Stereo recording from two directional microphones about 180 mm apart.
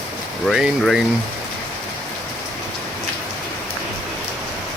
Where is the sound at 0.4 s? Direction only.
Centre (ahead or behind).